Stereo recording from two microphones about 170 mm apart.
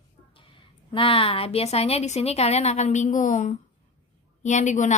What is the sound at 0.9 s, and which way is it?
A woman's voice, 30° left (ahead or behind).